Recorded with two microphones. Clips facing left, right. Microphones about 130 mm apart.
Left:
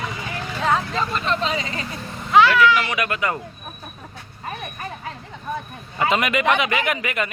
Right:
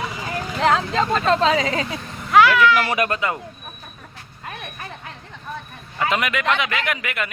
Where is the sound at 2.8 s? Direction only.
40° right (ahead or behind).